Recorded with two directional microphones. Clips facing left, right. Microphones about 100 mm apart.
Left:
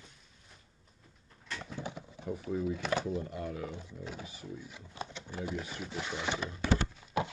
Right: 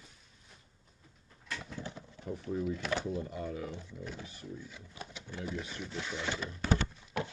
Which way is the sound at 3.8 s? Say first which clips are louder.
Left 1 dB; 15° left (ahead or behind).